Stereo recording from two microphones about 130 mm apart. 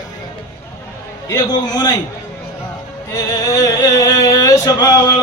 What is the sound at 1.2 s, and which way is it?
Speech, 30° left (ahead or behind).